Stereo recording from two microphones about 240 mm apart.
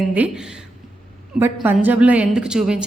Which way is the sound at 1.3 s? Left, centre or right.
Centre.